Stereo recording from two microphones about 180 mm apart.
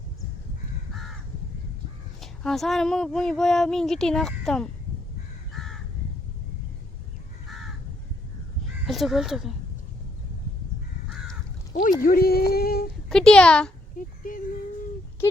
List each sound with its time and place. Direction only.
2.2 s speech: centre (ahead or behind)
5.5 s crow: centre (ahead or behind)
8.9 s speech: centre (ahead or behind)
11.7 s speech: 50° left (ahead or behind)
13.1 s speech: 5° left (ahead or behind)
13.9 s speech: 45° left (ahead or behind)
15.2 s speech: 15° left (ahead or behind)